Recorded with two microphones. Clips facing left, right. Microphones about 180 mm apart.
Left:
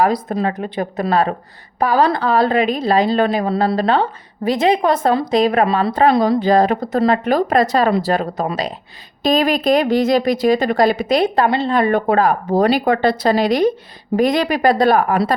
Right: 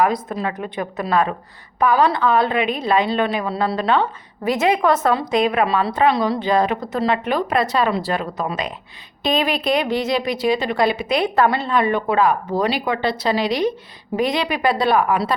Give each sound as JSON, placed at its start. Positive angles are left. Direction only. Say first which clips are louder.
{"t": 0.0, "sound": "a woman's voice", "louder": "left 3 dB", "side_deg": 35}